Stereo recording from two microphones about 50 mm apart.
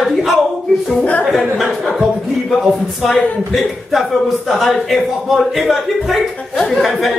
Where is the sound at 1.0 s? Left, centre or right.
Left.